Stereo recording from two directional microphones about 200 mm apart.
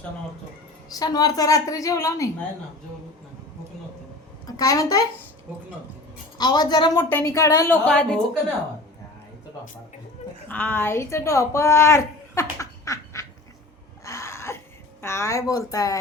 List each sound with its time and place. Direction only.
0.9 s a woman's voice: 20° left (ahead or behind)
4.4 s a woman's voice: 20° left (ahead or behind)
6.3 s a woman's voice: 20° left (ahead or behind)
7.9 s a woman's voice: 5° left (ahead or behind)
10.5 s a woman's voice: 10° left (ahead or behind)
14.0 s a sound: 15° left (ahead or behind)
15.0 s a woman's voice: 15° left (ahead or behind)